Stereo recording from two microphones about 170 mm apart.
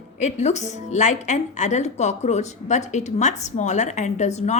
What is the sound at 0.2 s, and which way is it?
A woman's voice, 45° left (ahead or behind).